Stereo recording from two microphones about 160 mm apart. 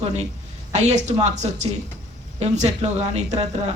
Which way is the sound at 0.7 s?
45° right (ahead or behind).